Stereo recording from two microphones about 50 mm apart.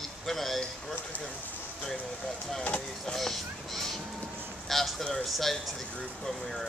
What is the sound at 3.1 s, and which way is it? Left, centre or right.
Speech, centre.